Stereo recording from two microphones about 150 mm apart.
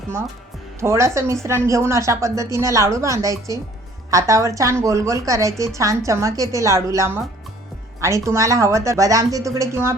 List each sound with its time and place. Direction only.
0.8 s a woman's voice: 20° right (ahead or behind)